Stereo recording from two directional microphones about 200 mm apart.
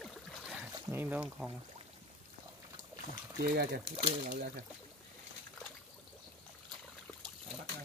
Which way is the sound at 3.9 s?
30° right (ahead or behind).